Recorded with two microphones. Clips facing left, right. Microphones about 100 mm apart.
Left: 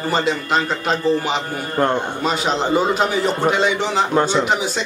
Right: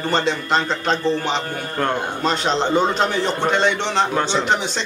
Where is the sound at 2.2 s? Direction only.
5° left (ahead or behind).